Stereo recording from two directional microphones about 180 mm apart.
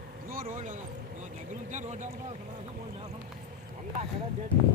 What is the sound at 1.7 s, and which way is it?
Speech, 40° right (ahead or behind).